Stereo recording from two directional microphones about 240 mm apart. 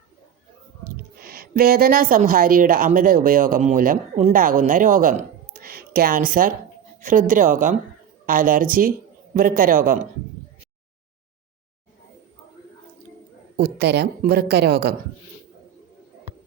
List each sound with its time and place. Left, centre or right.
1.2 s a woman's voice: right
13.6 s speech: right